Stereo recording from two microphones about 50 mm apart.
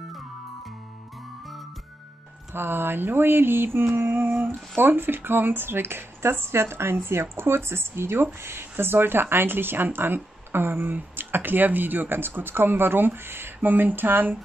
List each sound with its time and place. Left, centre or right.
2.5 s speech: right